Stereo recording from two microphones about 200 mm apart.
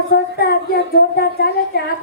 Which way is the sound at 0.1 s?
50° left (ahead or behind).